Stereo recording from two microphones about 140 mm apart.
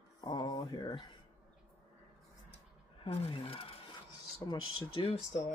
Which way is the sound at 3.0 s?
40° left (ahead or behind).